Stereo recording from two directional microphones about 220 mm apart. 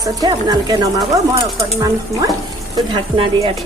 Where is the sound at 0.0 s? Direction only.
15° right (ahead or behind).